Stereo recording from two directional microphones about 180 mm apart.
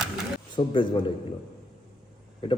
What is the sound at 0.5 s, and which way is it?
Speech, 25° left (ahead or behind).